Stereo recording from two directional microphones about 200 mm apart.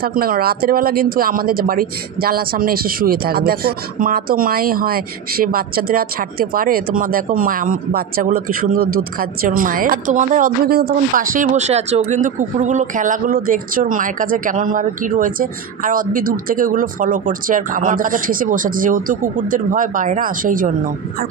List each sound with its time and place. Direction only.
0.0 s a woman's voice: 45° right (ahead or behind)